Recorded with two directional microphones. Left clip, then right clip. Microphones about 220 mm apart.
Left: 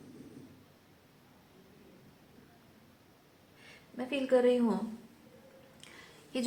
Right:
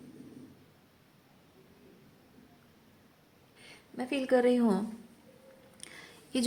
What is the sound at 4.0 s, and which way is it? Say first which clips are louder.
Speech: right 1 dB; 40° right (ahead or behind).